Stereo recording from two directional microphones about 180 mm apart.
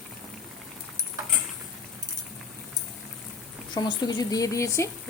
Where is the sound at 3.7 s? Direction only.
25° left (ahead or behind).